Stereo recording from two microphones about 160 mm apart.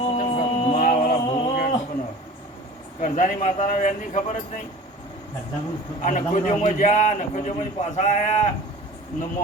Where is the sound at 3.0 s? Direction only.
50° left (ahead or behind).